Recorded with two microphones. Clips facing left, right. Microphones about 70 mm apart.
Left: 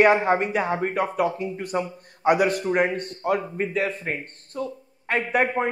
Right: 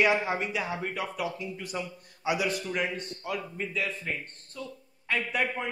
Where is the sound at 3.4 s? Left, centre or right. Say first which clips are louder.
Left 8 dB; left.